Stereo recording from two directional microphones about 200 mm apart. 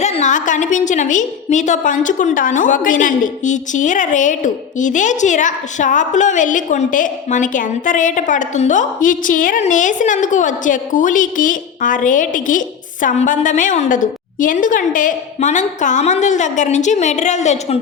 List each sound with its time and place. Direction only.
0.0 s a woman's voice: 35° left (ahead or behind)